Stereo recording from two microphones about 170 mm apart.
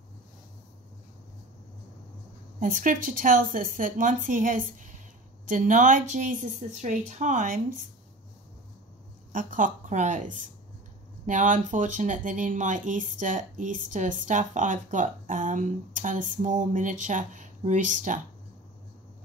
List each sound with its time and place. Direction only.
2.6 s speech: 50° right (ahead or behind)
9.3 s speech: 50° right (ahead or behind)